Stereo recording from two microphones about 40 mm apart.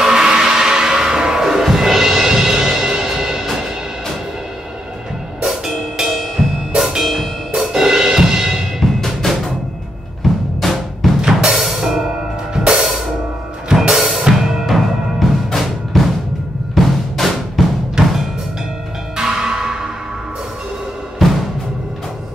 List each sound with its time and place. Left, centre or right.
0.0 s music: centre
5.5 s music: centre
9.0 s music: centre
10.2 s drum: centre
11.1 s music: centre
13.7 s drum kit: centre
16.7 s drum: centre
18.0 s music: centre
19.1 s music: centre
21.2 s timpani: centre